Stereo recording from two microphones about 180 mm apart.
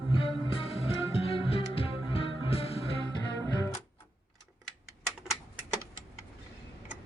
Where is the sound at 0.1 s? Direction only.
30° left (ahead or behind).